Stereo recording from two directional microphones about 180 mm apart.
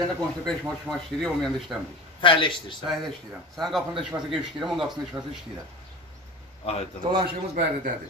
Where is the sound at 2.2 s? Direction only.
30° left (ahead or behind).